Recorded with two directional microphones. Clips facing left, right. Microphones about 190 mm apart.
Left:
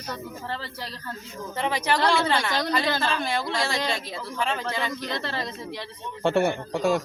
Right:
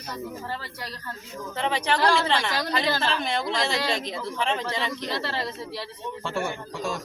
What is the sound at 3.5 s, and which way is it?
Speech, 20° right (ahead or behind).